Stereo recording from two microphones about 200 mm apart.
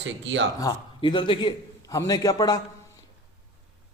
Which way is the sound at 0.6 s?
20° left (ahead or behind).